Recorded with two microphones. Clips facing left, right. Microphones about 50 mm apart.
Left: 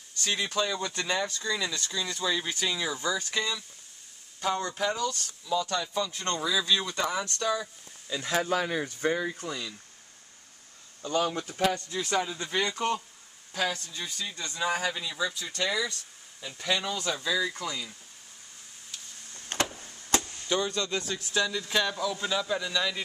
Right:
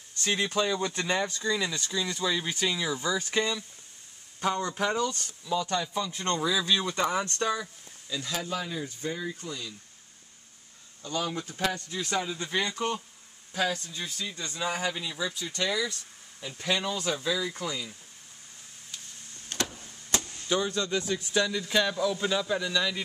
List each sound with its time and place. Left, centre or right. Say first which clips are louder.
0.2 s speech: right 2 dB; centre
3.2 s speech: right 3 dB; right
4.6 s speech: right 1 dB; right
5.5 s speech: even; centre
8.1 s speech: left 5 dB; left
8.5 s speech: left 5 dB; left
9.3 s speech: left 2 dB; left
11.0 s speech: left 4 dB; left
11.9 s speech: left 2 dB; centre
16.4 s speech: even; centre
19.5 s a sound: left 3 dB; left
20.4 s speech: right 1 dB; centre
21.4 s speech: right 1 dB; centre